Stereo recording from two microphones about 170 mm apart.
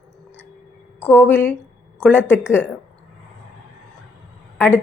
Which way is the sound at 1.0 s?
10° left (ahead or behind).